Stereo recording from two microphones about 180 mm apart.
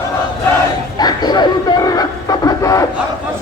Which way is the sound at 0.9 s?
25° left (ahead or behind).